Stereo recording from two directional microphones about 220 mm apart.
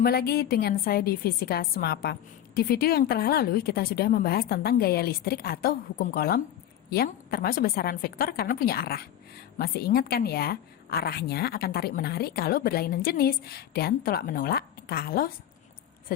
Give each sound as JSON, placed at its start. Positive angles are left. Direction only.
{"t": 0.0, "sound": "a woman's voice", "side_deg": 45}